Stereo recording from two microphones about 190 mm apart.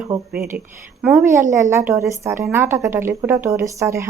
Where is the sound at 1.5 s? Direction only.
15° right (ahead or behind).